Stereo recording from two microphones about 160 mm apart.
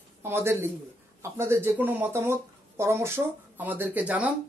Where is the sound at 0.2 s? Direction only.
15° right (ahead or behind).